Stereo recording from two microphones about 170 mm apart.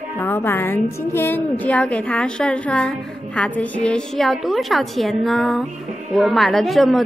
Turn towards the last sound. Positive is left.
turn(degrees=0)  # may be behind; listen again after turning